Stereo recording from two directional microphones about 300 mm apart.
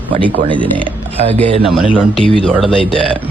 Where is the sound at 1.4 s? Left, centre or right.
Centre.